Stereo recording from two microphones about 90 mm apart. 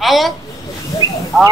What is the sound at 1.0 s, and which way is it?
Speech, 55° left (ahead or behind).